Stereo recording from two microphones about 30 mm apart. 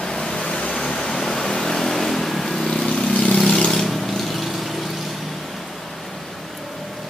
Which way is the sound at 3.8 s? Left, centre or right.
Centre.